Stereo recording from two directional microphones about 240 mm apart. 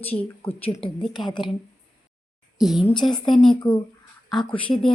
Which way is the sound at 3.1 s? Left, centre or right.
Centre.